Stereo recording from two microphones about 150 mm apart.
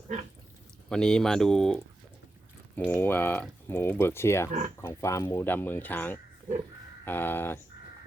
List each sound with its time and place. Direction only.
0.9 s speech: 5° left (ahead or behind)